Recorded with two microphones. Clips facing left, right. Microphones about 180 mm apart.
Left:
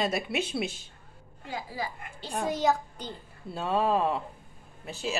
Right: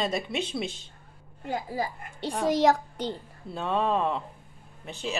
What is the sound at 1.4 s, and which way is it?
Speech, 55° right (ahead or behind).